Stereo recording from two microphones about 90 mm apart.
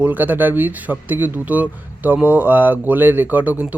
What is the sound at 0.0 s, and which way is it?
Speech, 20° right (ahead or behind).